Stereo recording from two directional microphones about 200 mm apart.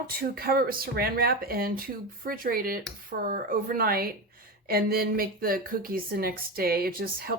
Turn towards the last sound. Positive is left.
turn(degrees=-50)  # may be behind; listen again after turning